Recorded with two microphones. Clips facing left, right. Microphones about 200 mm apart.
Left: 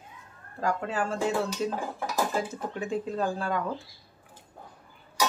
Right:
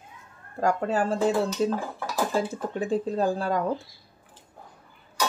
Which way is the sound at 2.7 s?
35° right (ahead or behind).